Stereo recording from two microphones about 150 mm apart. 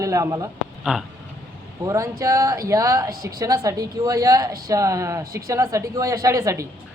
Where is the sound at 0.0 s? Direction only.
20° right (ahead or behind).